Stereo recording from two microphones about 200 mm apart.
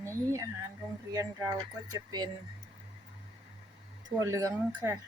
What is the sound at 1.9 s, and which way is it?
Speech, 20° right (ahead or behind).